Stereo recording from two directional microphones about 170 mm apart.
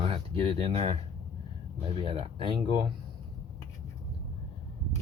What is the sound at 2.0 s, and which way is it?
Speech, 30° right (ahead or behind).